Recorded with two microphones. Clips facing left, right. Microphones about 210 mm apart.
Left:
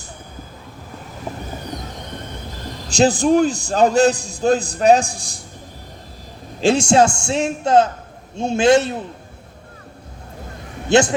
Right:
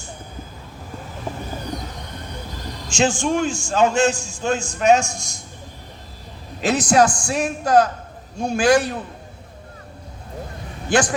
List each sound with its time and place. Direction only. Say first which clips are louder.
2.9 s a man's voice: left 5 dB; 35° left (ahead or behind)
6.6 s a man's voice: left 3 dB; 30° left (ahead or behind)
10.8 s a man's voice: left 5 dB; 25° left (ahead or behind)